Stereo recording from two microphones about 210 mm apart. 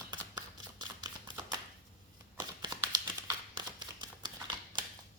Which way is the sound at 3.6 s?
20° right (ahead or behind).